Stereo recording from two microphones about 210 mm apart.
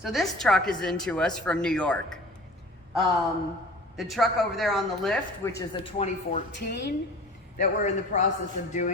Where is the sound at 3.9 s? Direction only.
Centre (ahead or behind).